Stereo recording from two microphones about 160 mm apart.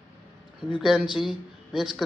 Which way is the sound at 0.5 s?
5° right (ahead or behind).